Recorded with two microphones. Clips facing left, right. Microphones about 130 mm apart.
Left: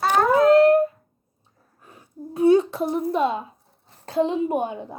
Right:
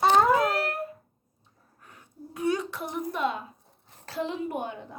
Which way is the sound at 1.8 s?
20° left (ahead or behind).